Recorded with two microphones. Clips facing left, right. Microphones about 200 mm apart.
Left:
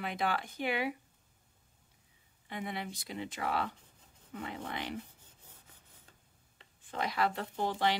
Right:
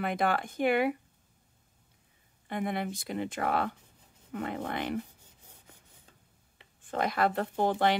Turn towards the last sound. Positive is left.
turn(degrees=-55)  # may be behind; listen again after turning